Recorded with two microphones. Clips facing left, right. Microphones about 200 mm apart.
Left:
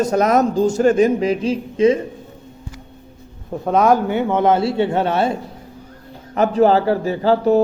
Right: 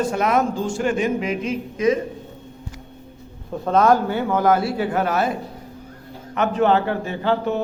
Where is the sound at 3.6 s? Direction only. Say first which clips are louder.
Left 2 dB; 15° left (ahead or behind).